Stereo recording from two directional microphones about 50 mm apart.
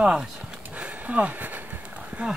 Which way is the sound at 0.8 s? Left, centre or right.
Right.